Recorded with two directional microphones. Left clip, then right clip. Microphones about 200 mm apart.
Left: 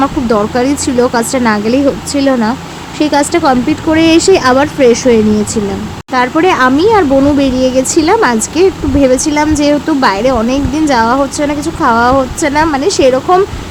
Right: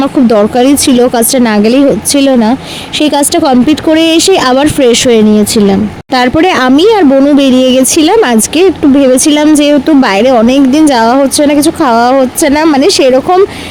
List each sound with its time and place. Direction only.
0.0 s speech: 25° right (ahead or behind)